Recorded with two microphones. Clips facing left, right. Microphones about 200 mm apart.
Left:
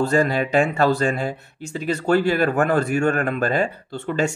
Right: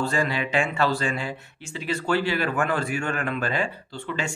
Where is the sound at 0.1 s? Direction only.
45° left (ahead or behind).